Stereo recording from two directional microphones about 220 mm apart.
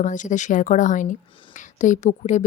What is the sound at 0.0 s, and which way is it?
A woman's voice, 35° left (ahead or behind).